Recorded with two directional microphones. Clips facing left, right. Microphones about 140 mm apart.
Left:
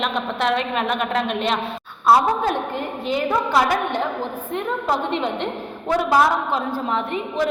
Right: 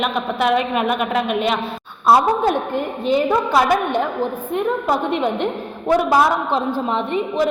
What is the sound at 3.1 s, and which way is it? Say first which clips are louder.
A woman's voice: right 4 dB; 20° right (ahead or behind).